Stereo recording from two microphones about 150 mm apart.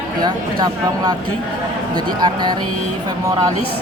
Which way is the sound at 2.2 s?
30° right (ahead or behind).